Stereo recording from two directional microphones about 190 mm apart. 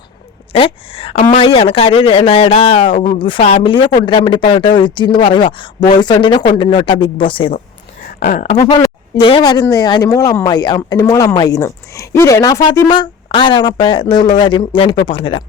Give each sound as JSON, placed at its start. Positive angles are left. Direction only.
{"t": 0.5, "sound": "speech", "side_deg": 30}
{"t": 8.2, "sound": "speech", "side_deg": 45}
{"t": 8.5, "sound": "speech", "side_deg": 20}